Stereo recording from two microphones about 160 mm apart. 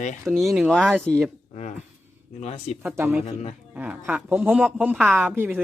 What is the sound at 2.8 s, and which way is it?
Speech, 15° right (ahead or behind).